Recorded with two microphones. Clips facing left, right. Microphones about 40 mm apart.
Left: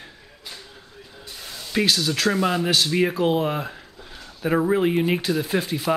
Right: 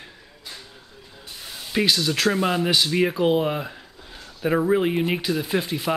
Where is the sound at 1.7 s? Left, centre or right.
Centre.